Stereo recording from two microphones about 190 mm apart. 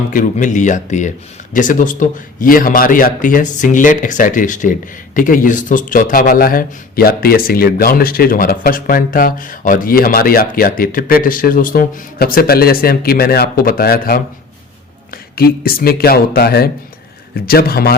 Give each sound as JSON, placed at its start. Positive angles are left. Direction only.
{"t": 0.1, "sound": "speech", "side_deg": 45}